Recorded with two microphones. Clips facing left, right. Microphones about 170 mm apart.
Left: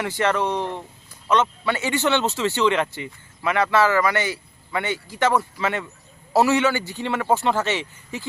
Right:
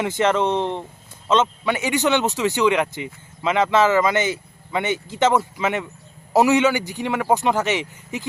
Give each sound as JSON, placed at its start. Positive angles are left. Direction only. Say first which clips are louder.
{"t": 0.0, "sound": "speech", "louder": "right 3 dB", "side_deg": -20}